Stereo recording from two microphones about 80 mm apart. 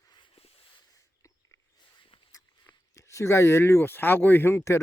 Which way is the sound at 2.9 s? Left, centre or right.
Left.